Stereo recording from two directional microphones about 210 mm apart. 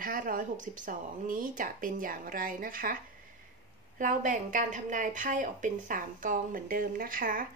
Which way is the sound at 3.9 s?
40° right (ahead or behind).